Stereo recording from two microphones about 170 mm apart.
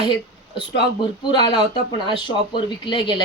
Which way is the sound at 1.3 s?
25° left (ahead or behind).